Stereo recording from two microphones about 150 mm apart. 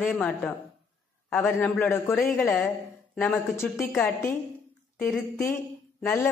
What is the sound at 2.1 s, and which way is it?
A woman's voice, centre (ahead or behind).